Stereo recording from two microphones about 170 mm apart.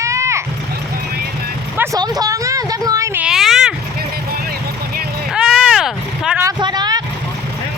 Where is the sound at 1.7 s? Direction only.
15° right (ahead or behind).